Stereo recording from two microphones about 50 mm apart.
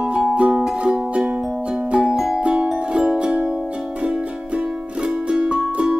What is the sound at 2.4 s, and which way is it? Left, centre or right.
Music, centre.